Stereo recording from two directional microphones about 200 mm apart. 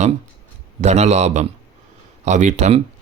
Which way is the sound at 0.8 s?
35° right (ahead or behind).